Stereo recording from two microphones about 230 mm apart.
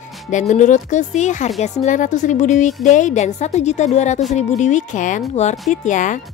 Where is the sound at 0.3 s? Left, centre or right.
Left.